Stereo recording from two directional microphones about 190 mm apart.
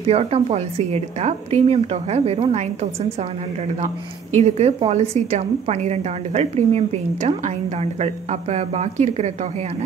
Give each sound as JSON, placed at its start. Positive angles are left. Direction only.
{"t": 0.0, "sound": "a woman's voice", "side_deg": -30}
{"t": 4.4, "sound": "a woman's voice", "side_deg": -35}